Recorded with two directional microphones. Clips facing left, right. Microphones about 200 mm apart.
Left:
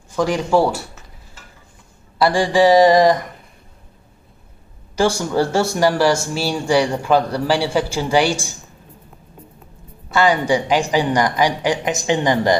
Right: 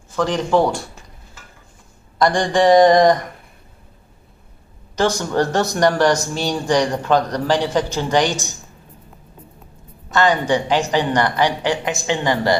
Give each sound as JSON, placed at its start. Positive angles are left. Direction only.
{"t": 0.1, "sound": "a woman's voice", "side_deg": 10}
{"t": 2.1, "sound": "a sound", "side_deg": 5}
{"t": 4.9, "sound": "a woman's voice", "side_deg": 10}
{"t": 5.8, "sound": "a sound", "side_deg": 5}
{"t": 6.2, "sound": "a woman's voice", "side_deg": 5}
{"t": 10.1, "sound": "a woman's voice", "side_deg": 10}